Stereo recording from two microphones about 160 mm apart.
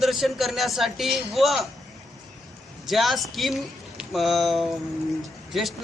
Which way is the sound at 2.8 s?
Centre (ahead or behind).